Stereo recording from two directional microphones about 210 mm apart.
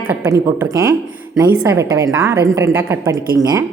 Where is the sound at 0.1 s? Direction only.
10° right (ahead or behind).